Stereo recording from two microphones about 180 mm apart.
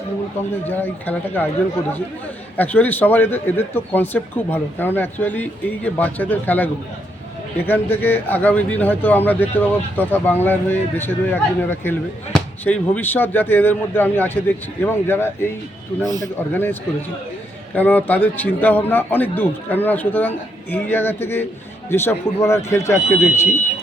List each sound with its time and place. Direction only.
0.7 s speech: 10° left (ahead or behind)
2.6 s speech: 10° left (ahead or behind)
17.7 s speech: 10° left (ahead or behind)